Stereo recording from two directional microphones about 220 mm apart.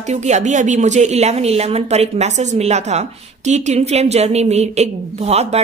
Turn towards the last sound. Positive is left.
turn(degrees=-30)  # may be behind; listen again after turning